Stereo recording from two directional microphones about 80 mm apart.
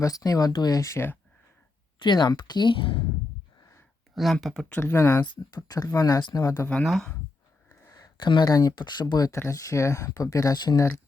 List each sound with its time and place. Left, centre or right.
0.0 s speech: left
2.0 s speech: left
4.1 s speech: centre
4.7 s speech: left
5.2 s speech: left
5.5 s speech: left
5.9 s speech: left
6.1 s speech: left
6.8 s speech: centre
7.9 s a sound: left
8.4 s speech: left
9.3 s speech: left